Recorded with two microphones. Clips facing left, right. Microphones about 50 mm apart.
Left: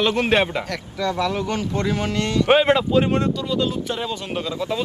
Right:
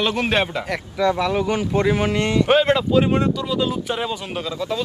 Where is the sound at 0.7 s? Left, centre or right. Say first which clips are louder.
Right 4 dB; centre.